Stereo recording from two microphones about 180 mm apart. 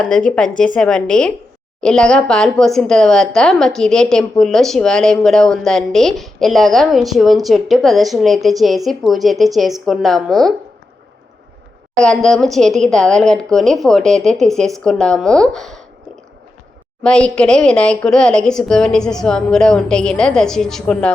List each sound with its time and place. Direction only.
0.0 s speech: 5° left (ahead or behind)
11.9 s speech: 5° left (ahead or behind)
17.0 s speech: 5° left (ahead or behind)